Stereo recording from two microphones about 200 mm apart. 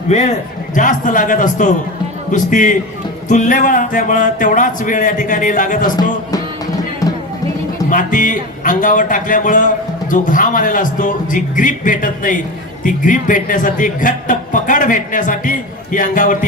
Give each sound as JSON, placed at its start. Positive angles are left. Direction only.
{"t": 0.1, "sound": "a man's voice", "side_deg": 35}
{"t": 7.0, "sound": "music", "side_deg": 15}
{"t": 7.9, "sound": "a man's voice", "side_deg": 40}